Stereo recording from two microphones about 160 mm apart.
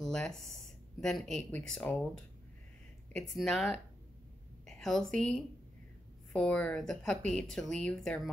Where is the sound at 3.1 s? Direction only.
5° left (ahead or behind).